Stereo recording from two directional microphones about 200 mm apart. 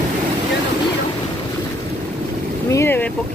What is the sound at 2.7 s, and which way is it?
Boat, 10° left (ahead or behind).